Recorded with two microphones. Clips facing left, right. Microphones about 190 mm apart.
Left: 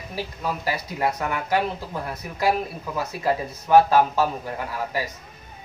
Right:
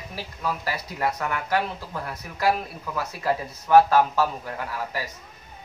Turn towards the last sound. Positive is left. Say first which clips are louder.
# left 2 dB
turn(degrees=20)  # may be behind; listen again after turning